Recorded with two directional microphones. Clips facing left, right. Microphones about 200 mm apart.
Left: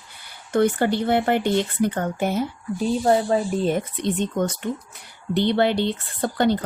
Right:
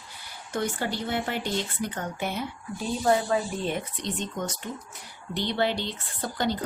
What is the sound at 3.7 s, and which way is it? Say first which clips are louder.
Speech: left 8 dB; 55° left (ahead or behind).